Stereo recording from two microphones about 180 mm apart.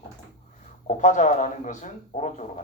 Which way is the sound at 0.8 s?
45° left (ahead or behind).